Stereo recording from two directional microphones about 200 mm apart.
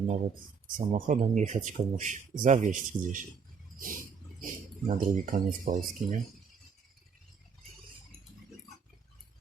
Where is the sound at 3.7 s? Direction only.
45° right (ahead or behind).